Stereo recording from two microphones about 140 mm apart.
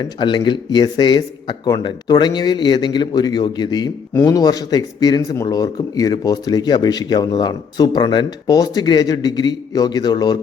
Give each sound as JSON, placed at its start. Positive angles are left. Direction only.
{"t": 0.0, "sound": "a man's voice", "side_deg": 30}